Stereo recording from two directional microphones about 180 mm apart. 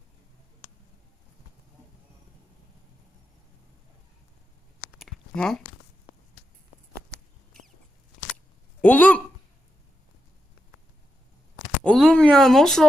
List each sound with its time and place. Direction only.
4.8 s a sound: centre (ahead or behind)
8.8 s speech: 10° left (ahead or behind)
11.8 s speech: 5° left (ahead or behind)